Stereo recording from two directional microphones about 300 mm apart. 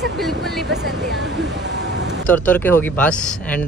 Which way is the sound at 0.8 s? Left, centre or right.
Right.